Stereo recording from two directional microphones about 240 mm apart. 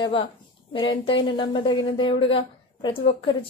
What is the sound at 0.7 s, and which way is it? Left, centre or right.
A woman's voice, left.